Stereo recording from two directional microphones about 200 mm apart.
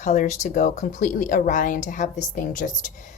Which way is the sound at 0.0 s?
35° left (ahead or behind).